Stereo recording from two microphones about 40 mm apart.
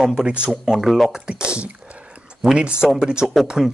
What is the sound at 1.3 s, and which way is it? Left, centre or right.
Speech, right.